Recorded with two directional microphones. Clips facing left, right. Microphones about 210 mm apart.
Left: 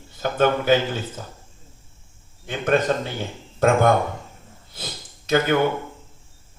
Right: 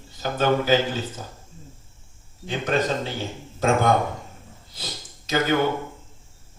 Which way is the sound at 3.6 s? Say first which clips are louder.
Left 3 dB; 55° left (ahead or behind).